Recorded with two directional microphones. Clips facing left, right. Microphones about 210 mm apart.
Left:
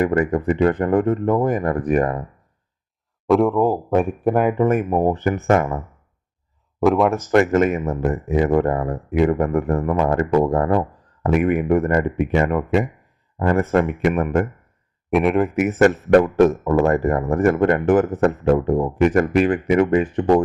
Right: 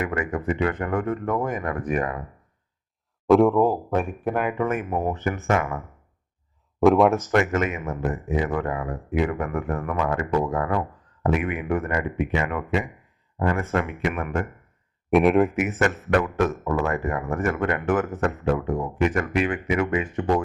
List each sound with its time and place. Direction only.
0.0 s speech: 35° left (ahead or behind)
3.2 s speech: centre (ahead or behind)
4.2 s speech: 45° left (ahead or behind)
6.7 s speech: centre (ahead or behind)
7.3 s speech: 35° left (ahead or behind)
15.1 s speech: centre (ahead or behind)
15.5 s speech: 40° left (ahead or behind)